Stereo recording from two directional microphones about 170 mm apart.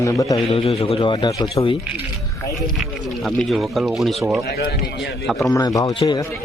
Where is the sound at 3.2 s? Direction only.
Centre (ahead or behind).